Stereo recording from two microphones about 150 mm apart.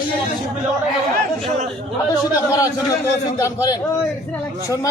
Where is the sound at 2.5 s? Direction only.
20° left (ahead or behind).